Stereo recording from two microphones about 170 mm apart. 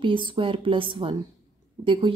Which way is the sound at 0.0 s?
30° right (ahead or behind).